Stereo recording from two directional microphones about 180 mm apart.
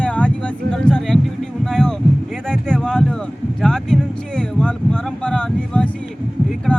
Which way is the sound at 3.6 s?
5° left (ahead or behind).